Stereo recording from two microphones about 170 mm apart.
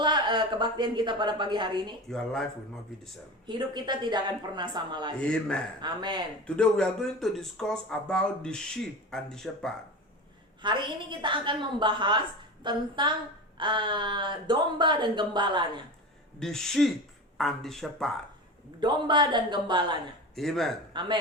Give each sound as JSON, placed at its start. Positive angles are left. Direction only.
{"t": 0.0, "sound": "a woman's voice", "side_deg": -25}
{"t": 2.0, "sound": "speech", "side_deg": 5}
{"t": 3.4, "sound": "speech", "side_deg": -25}
{"t": 5.2, "sound": "speech", "side_deg": 5}
{"t": 5.8, "sound": "speech", "side_deg": -25}
{"t": 6.6, "sound": "speech", "side_deg": 5}
{"t": 10.6, "sound": "speech", "side_deg": -30}
{"t": 16.4, "sound": "speech", "side_deg": 0}
{"t": 18.8, "sound": "speech", "side_deg": -25}
{"t": 20.3, "sound": "speech", "side_deg": 0}
{"t": 20.9, "sound": "speech", "side_deg": -25}